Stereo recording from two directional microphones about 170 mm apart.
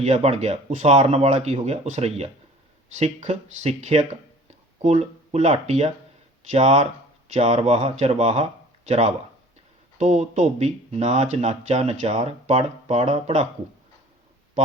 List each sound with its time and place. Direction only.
0.0 s speech: 40° right (ahead or behind)